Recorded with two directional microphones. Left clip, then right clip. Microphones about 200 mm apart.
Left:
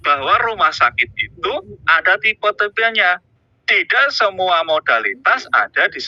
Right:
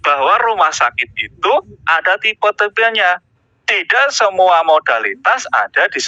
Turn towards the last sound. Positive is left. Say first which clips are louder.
# right 1 dB
turn(degrees=-45)  # may be behind; listen again after turning